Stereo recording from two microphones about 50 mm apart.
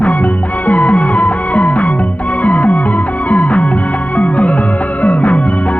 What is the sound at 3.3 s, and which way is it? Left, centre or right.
Music, left.